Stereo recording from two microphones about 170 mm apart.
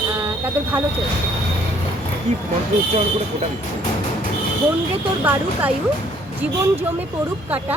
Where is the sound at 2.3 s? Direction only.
40° right (ahead or behind).